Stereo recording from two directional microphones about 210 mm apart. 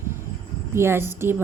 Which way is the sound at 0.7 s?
10° right (ahead or behind).